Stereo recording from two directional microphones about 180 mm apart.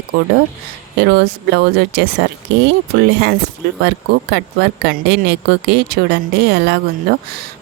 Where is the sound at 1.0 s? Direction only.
70° right (ahead or behind).